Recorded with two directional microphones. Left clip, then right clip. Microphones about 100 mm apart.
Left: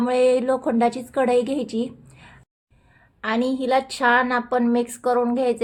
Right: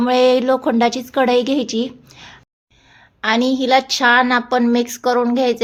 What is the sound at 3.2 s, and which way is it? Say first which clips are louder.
Speech: right 6 dB; 25° right (ahead or behind).